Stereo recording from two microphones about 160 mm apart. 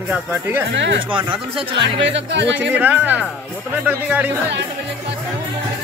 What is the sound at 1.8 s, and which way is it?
Speech, 90° right.